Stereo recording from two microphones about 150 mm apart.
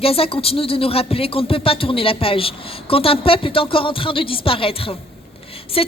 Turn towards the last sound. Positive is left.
turn(degrees=40)  # may be behind; listen again after turning